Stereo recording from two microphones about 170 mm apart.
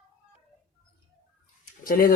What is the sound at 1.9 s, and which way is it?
Speech, 60° left (ahead or behind).